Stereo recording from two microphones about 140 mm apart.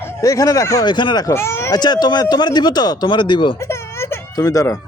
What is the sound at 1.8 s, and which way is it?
Speech, 30° left (ahead or behind).